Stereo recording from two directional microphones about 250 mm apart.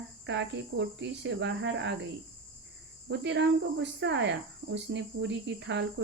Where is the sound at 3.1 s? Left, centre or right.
Right.